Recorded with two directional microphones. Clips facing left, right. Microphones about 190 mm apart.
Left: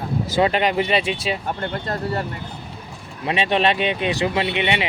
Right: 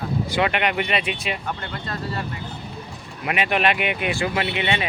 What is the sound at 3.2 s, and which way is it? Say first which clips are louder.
Speech: left 2 dB; 25° left (ahead or behind).